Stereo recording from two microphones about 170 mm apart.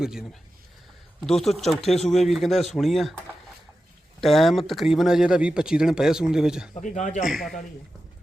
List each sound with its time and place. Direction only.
0.0 s speech: 5° right (ahead or behind)
1.3 s speech: centre (ahead or behind)
4.2 s speech: centre (ahead or behind)
6.8 s speech: 45° left (ahead or behind)
7.2 s speech: centre (ahead or behind)